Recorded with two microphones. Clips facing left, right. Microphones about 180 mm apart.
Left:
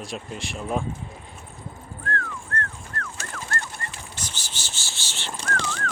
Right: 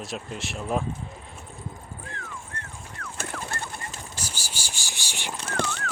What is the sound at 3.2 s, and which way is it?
Bird, 55° right (ahead or behind).